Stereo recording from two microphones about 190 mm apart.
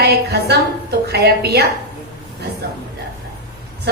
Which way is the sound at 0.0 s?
60° right (ahead or behind).